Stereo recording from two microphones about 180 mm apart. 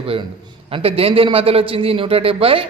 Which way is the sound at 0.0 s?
30° right (ahead or behind).